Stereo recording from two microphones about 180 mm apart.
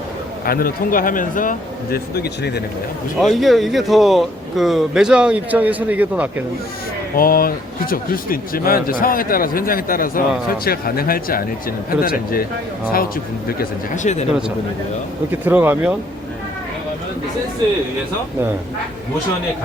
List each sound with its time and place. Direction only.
0.4 s speech: 55° left (ahead or behind)
3.2 s speech: centre (ahead or behind)
7.2 s speech: 55° left (ahead or behind)
13.5 s speech: 50° left (ahead or behind)
15.3 s speech: 10° right (ahead or behind)